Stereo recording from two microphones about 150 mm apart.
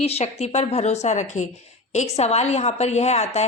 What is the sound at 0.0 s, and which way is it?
A woman's voice, 45° left (ahead or behind).